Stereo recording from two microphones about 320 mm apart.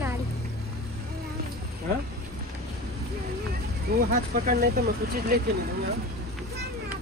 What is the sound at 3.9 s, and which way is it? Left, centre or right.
Speech, right.